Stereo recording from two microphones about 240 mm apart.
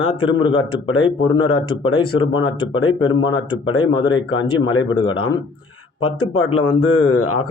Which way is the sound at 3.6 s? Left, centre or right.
Left.